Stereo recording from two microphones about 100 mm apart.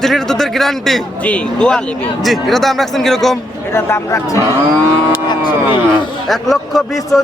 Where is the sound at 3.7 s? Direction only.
25° left (ahead or behind).